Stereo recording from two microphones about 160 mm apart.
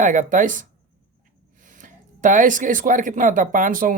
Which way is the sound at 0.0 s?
55° right (ahead or behind).